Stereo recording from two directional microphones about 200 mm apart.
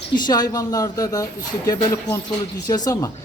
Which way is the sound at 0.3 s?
20° left (ahead or behind).